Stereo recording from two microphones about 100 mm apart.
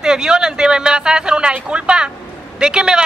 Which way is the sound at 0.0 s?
5° right (ahead or behind).